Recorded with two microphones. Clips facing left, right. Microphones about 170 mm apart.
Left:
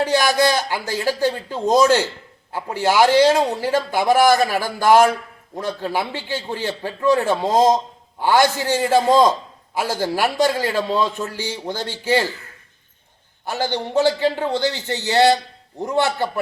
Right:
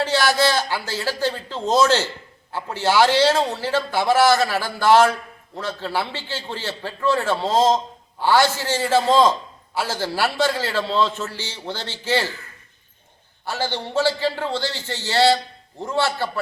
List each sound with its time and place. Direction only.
0.0 s a man's voice: 15° left (ahead or behind)
13.4 s a man's voice: 15° left (ahead or behind)